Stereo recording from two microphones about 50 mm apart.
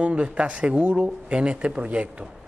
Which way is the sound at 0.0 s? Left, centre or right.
Right.